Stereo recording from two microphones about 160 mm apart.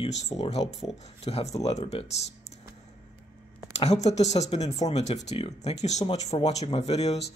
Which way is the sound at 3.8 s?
40° left (ahead or behind).